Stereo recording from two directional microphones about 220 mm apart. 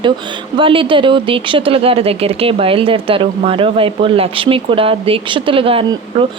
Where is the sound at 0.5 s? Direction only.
25° right (ahead or behind).